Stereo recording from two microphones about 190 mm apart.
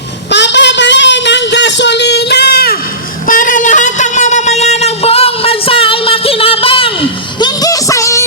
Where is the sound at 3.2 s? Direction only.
45° left (ahead or behind); by 8.2 s 15° left (ahead or behind).